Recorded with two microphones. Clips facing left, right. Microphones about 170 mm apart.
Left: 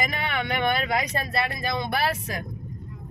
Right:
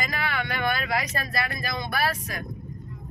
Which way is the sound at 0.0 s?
25° left (ahead or behind).